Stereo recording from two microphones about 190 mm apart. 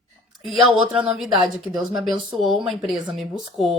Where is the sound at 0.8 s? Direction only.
5° right (ahead or behind).